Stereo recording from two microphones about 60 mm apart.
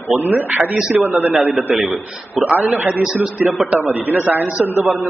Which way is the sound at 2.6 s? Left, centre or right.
Right.